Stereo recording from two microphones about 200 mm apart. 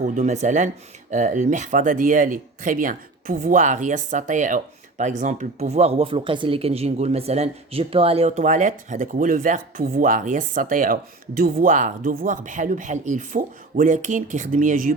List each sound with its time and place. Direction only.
0.0 s speech: 35° right (ahead or behind)